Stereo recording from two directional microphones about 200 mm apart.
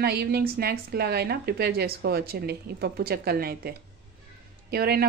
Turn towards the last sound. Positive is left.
turn(degrees=-50)  # may be behind; listen again after turning